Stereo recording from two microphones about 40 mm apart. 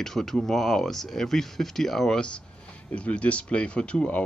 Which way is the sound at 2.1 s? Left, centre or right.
Left.